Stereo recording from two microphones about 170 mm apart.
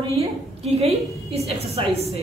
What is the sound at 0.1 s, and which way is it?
Speech, 35° right (ahead or behind).